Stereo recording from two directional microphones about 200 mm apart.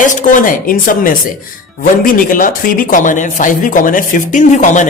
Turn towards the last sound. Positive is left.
turn(degrees=35)  # may be behind; listen again after turning